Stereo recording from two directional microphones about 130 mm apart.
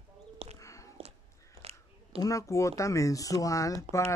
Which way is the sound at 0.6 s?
25° left (ahead or behind).